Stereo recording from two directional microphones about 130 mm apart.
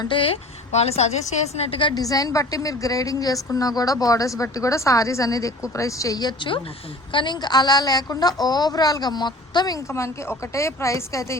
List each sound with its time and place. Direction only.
0.0 s a woman's voice: 40° left (ahead or behind)
2.0 s a woman's voice: 25° left (ahead or behind)